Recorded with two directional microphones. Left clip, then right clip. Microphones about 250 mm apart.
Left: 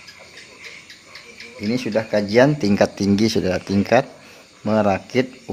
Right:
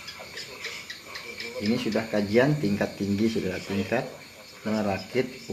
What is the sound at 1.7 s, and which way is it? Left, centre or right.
Speech, left.